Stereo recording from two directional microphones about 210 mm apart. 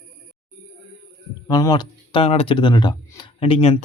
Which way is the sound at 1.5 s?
15° left (ahead or behind).